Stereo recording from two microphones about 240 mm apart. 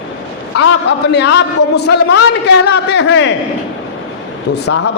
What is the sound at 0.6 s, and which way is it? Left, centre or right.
A man's voice, left.